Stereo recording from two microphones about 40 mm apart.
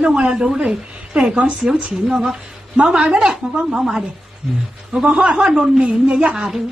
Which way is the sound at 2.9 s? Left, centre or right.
Right.